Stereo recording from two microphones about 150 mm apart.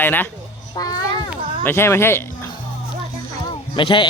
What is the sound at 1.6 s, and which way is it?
Speech, 15° left (ahead or behind).